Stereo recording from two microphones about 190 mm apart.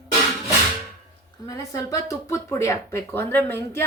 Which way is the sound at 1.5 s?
15° left (ahead or behind).